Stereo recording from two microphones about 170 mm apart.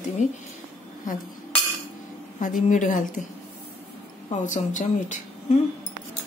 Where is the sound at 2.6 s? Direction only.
50° left (ahead or behind).